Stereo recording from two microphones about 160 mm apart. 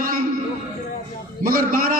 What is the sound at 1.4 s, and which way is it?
Speech, 65° right (ahead or behind).